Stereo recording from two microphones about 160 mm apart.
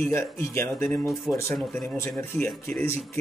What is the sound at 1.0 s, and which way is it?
Speech, centre (ahead or behind).